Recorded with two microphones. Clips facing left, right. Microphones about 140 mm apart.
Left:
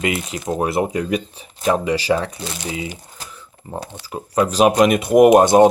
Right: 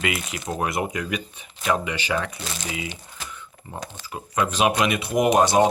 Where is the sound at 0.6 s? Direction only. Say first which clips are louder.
Left 6 dB; 30° left (ahead or behind).